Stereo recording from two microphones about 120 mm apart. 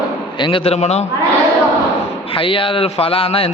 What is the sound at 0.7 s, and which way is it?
Speech, 65° left (ahead or behind).